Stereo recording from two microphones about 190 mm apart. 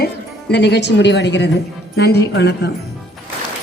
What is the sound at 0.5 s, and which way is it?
A woman's voice, 65° left (ahead or behind).